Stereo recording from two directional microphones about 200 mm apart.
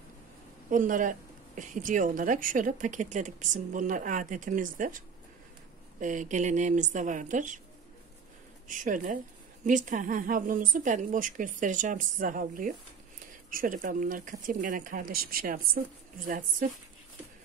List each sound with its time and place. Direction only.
0.7 s a woman's voice: 40° right (ahead or behind)
8.6 s a woman's voice: 40° right (ahead or behind)